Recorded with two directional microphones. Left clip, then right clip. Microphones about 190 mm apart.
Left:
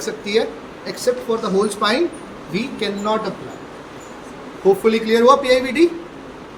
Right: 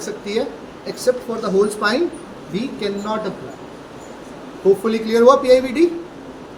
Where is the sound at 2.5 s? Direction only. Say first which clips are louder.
Left 1 dB; 25° left (ahead or behind).